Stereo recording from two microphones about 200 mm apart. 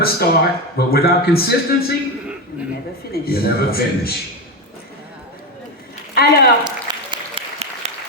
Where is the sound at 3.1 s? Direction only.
50° left (ahead or behind).